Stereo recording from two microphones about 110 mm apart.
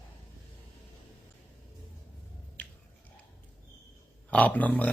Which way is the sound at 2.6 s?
15° left (ahead or behind).